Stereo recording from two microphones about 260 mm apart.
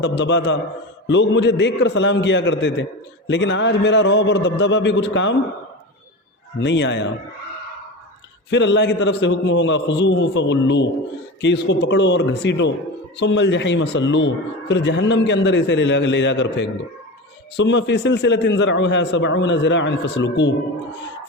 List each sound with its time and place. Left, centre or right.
0.0 s speech: left
6.6 s speech: left
8.4 s speech: left